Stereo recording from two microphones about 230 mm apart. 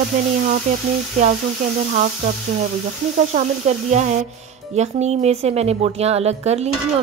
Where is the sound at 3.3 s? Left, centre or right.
Right.